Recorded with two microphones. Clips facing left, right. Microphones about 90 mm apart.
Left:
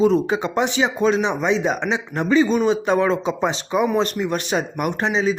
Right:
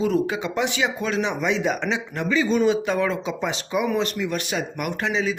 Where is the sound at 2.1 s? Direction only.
35° left (ahead or behind).